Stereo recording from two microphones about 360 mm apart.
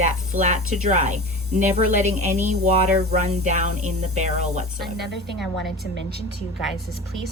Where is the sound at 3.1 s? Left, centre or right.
Centre.